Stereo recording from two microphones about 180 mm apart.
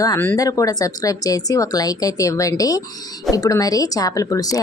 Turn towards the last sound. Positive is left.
turn(degrees=20)  # may be behind; listen again after turning